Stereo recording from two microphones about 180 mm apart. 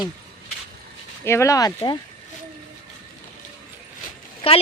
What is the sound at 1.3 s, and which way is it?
Speech, 15° left (ahead or behind).